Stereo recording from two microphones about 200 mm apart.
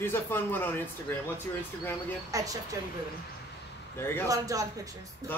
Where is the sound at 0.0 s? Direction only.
10° left (ahead or behind).